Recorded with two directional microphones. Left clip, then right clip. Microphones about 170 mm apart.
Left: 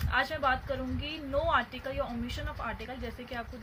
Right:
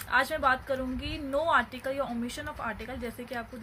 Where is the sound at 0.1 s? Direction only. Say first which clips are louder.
Right 3 dB; 50° right (ahead or behind).